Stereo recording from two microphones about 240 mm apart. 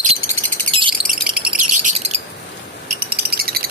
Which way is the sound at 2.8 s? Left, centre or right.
Right.